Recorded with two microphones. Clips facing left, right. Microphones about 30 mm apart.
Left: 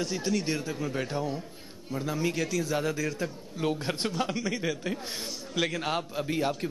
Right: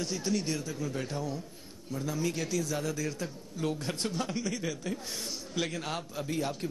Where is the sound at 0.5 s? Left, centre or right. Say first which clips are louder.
Left 3 dB; left.